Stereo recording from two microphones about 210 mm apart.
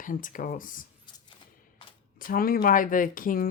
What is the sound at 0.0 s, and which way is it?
Speech, 40° left (ahead or behind).